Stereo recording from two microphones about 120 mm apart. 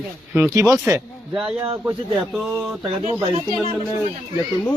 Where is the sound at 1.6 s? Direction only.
20° right (ahead or behind).